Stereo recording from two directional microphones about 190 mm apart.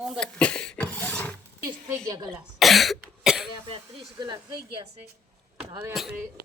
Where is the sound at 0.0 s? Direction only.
Centre (ahead or behind).